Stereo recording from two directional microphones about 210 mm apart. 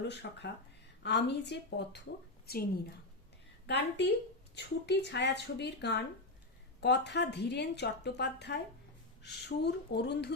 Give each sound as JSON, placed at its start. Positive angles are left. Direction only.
{"t": 0.1, "sound": "a woman's voice", "side_deg": 55}
{"t": 3.7, "sound": "a woman's voice", "side_deg": 55}